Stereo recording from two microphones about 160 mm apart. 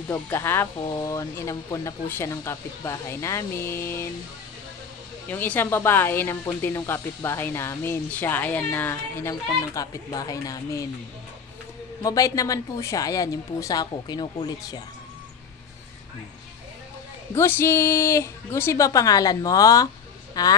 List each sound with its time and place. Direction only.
0.1 s speech: 15° left (ahead or behind)
5.3 s speech: 10° left (ahead or behind)
12.0 s a woman's voice: 20° left (ahead or behind)
17.3 s a woman's voice: 15° left (ahead or behind)